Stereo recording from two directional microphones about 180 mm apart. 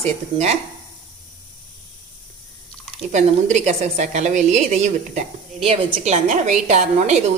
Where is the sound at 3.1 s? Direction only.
40° right (ahead or behind).